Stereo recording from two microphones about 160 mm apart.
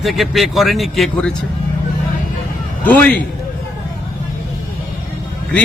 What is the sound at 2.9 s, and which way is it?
Speech, 10° left (ahead or behind).